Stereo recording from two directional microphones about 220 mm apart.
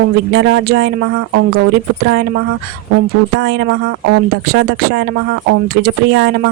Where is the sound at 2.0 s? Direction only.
50° right (ahead or behind).